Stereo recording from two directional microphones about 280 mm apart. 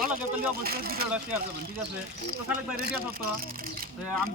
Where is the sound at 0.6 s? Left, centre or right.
Right.